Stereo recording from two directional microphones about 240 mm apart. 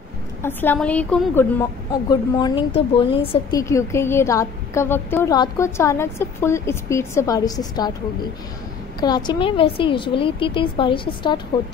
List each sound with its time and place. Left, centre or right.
0.4 s speech: centre
2.3 s speech: left
9.0 s a woman's voice: centre